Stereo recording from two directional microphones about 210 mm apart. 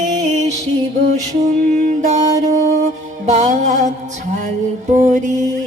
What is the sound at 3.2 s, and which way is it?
Music, 35° right (ahead or behind).